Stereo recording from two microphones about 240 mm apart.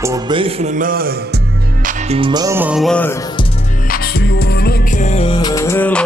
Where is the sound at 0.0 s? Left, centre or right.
Centre.